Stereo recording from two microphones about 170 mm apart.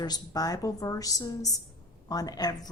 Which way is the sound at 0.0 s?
20° left (ahead or behind).